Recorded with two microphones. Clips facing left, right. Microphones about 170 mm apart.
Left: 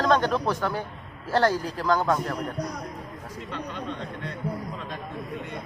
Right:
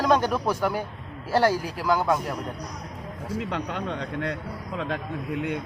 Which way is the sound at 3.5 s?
90° right.